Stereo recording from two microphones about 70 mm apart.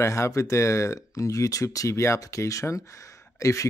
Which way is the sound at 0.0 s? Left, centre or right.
Left.